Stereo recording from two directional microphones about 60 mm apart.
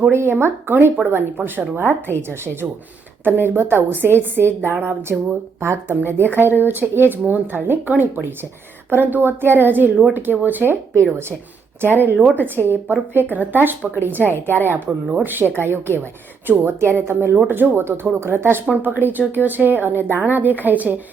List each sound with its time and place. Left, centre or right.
0.1 s a woman's voice: right